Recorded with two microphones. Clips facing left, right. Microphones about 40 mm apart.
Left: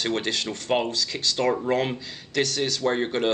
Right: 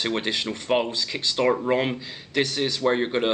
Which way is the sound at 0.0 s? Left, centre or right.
Centre.